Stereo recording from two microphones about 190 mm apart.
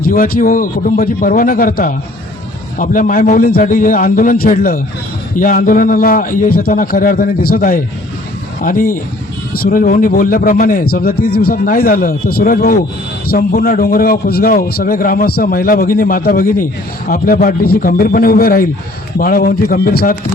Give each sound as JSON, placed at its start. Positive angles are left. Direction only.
{"t": 0.0, "sound": "a man's voice", "side_deg": 45}